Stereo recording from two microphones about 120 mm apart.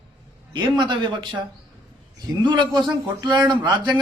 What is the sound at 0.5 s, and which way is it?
Speech, 40° right (ahead or behind).